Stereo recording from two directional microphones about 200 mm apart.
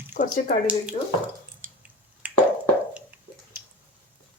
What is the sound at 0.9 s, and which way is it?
Speech, 30° left (ahead or behind).